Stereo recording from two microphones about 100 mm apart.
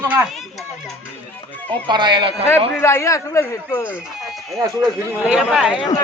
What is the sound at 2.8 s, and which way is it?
Speech, 25° left (ahead or behind).